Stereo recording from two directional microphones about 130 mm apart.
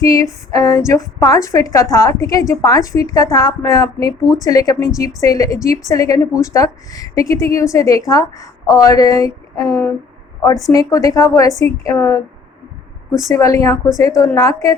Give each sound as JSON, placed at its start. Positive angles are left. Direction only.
{"t": 0.0, "sound": "a woman's voice", "side_deg": 25}
{"t": 13.2, "sound": "a woman's voice", "side_deg": 25}